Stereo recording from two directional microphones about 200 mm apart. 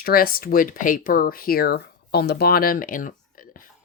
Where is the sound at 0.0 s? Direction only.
45° left (ahead or behind).